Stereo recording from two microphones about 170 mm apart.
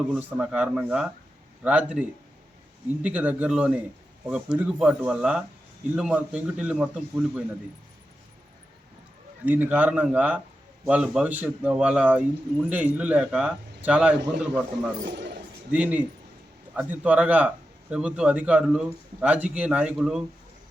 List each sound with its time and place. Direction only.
0.1 s a man's voice: 5° right (ahead or behind)
9.5 s a man's voice: 10° right (ahead or behind)
15.1 s speech: 85° right
15.7 s a man's voice: 10° right (ahead or behind)